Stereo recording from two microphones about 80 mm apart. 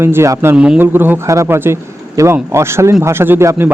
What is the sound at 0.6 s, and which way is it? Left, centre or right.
Speech, centre.